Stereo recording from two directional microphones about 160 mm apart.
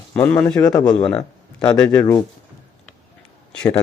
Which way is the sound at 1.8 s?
10° left (ahead or behind).